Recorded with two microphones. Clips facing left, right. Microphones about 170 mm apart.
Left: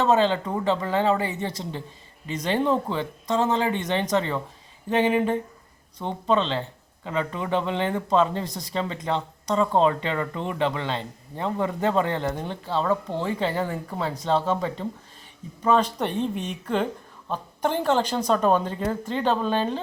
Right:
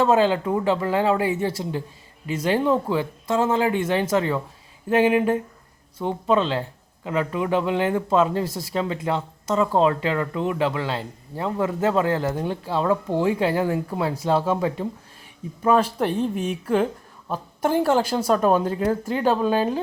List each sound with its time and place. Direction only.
0.0 s speech: 10° right (ahead or behind)